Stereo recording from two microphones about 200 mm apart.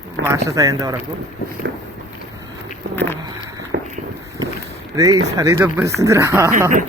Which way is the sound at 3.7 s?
60° right (ahead or behind).